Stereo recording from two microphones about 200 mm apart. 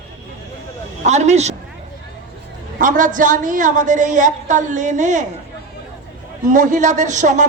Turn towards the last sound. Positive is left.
turn(degrees=-40)  # may be behind; listen again after turning